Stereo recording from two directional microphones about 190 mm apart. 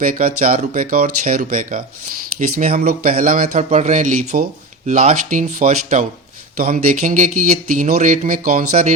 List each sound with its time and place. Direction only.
0.0 s speech: 50° right (ahead or behind)